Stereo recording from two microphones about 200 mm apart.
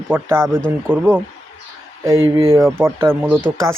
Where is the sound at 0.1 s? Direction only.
10° right (ahead or behind).